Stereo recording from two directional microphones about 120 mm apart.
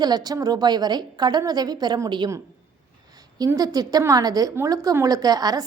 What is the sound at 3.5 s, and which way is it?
A woman's voice, 30° right (ahead or behind).